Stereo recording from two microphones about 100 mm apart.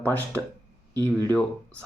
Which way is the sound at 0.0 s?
15° left (ahead or behind).